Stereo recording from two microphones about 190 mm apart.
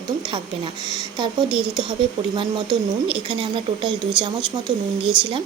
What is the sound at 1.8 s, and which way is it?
A woman's voice, 25° right (ahead or behind).